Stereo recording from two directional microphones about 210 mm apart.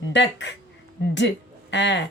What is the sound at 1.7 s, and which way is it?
Speech, 60° left (ahead or behind).